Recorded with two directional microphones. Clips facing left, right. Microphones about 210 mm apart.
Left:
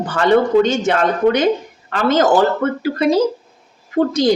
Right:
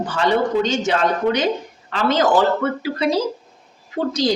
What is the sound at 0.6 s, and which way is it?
Speech, 55° left (ahead or behind).